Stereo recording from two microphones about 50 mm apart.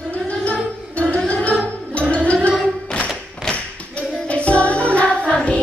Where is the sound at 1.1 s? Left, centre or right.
Left.